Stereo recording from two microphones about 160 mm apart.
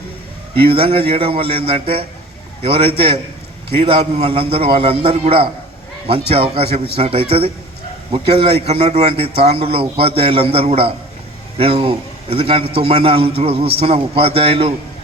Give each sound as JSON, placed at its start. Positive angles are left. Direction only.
{"t": 0.5, "sound": "a man's voice", "side_deg": -35}